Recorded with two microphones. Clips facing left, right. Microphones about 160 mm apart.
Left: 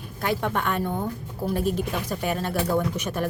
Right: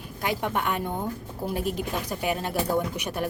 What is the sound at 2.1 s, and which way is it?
A woman's voice, 15° right (ahead or behind).